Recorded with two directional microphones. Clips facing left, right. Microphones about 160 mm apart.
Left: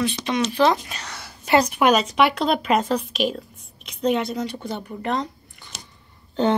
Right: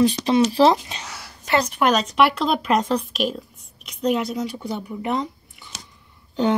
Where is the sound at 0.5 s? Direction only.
30° right (ahead or behind).